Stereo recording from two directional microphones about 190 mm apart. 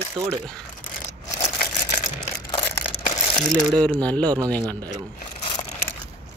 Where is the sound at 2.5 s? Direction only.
20° left (ahead or behind).